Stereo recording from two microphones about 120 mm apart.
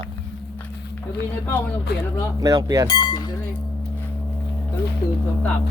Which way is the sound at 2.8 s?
35° left (ahead or behind).